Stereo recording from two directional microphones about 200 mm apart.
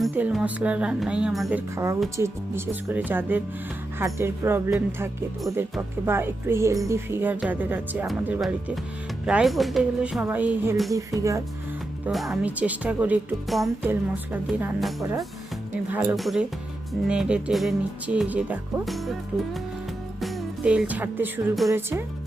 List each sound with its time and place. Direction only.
0.0 s speech: 5° right (ahead or behind)
1.7 s speech: 15° right (ahead or behind)
10.9 s speech: 15° right (ahead or behind)
12.0 s speech: centre (ahead or behind)
15.9 s speech: 15° right (ahead or behind)
16.1 s speech: centre (ahead or behind)
20.2 s music: 5° right (ahead or behind)
21.7 s speech: 10° right (ahead or behind)